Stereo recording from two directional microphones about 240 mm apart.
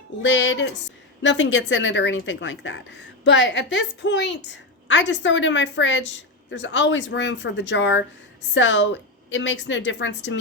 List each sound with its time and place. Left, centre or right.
0.2 s a woman's voice: left